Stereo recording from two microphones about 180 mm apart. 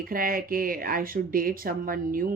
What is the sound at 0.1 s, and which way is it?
Speech, 50° right (ahead or behind).